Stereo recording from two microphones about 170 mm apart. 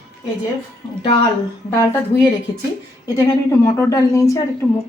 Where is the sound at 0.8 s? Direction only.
20° left (ahead or behind).